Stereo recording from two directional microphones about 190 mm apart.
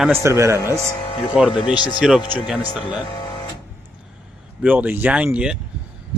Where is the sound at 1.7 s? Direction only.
25° left (ahead or behind).